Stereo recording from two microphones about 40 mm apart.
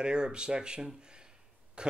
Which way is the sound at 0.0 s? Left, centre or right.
Right.